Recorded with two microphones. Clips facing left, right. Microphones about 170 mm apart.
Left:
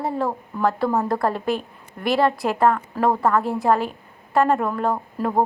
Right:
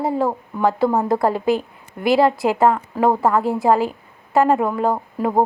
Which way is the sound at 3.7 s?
25° right (ahead or behind).